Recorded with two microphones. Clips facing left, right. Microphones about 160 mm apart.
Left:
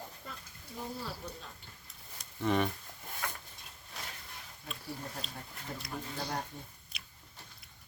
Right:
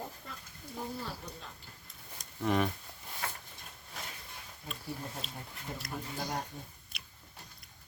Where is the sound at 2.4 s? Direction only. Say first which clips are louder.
Even; centre (ahead or behind).